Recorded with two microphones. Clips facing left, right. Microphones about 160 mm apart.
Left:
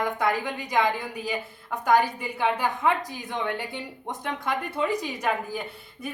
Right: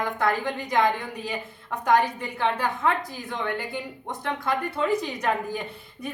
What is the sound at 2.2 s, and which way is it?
Speech, 10° left (ahead or behind).